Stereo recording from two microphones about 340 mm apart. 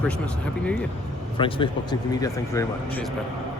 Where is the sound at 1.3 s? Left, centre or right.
Centre.